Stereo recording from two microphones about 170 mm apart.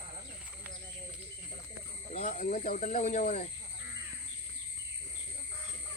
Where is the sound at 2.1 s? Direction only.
50° left (ahead or behind).